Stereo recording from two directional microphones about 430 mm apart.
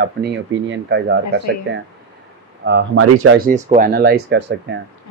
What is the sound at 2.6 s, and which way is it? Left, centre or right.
Speech, right.